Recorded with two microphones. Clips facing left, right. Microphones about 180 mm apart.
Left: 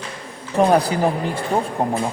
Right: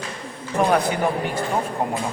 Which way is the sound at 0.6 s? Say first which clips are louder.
Left 3 dB; 35° left (ahead or behind).